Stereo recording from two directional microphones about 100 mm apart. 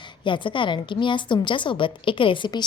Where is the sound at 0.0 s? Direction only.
55° left (ahead or behind).